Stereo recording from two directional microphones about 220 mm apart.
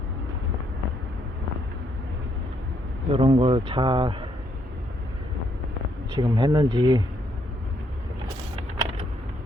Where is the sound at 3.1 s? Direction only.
25° right (ahead or behind).